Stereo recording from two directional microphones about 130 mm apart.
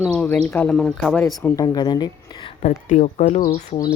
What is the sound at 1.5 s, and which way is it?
A woman's voice, 30° left (ahead or behind).